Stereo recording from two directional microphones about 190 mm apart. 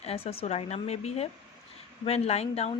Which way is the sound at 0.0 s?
30° left (ahead or behind).